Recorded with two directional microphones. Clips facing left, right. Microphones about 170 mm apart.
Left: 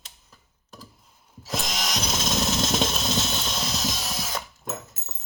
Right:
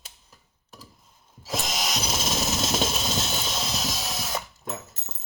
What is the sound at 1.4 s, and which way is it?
Drill, 5° right (ahead or behind).